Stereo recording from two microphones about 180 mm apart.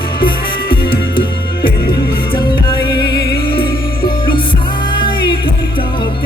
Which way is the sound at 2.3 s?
25° left (ahead or behind).